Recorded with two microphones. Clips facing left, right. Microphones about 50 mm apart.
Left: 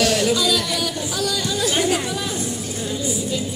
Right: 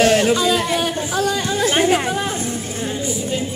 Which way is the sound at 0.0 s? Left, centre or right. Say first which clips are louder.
Right 4 dB; right.